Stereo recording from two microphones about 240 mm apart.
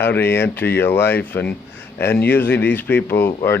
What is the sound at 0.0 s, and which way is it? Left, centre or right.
Speech, centre.